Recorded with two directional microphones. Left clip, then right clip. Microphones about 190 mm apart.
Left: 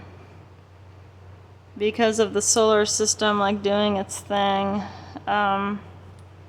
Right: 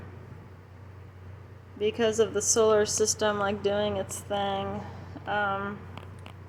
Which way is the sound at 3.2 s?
30° left (ahead or behind).